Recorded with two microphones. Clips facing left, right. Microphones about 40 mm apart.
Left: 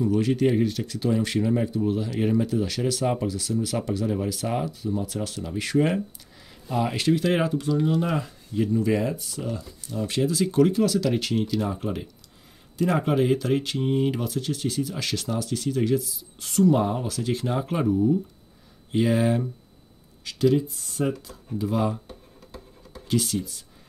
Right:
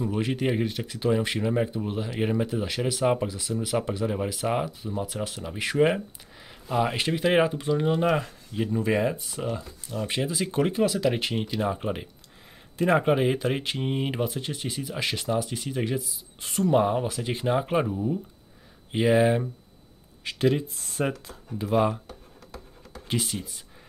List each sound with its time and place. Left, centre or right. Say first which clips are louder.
0.0 s speech: left 5 dB; right
20.2 s speech: left 3 dB; right
23.0 s speech: left 5 dB; right